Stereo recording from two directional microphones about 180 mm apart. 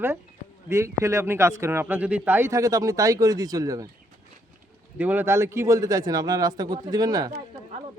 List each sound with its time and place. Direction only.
0.7 s speech: 15° right (ahead or behind)
4.9 s speech: 10° right (ahead or behind)